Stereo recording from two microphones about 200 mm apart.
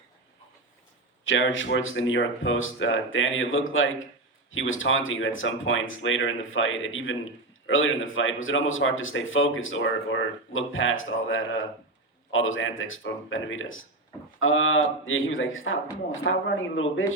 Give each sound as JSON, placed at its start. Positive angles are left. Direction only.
{"t": 1.2, "sound": "speech", "side_deg": 70}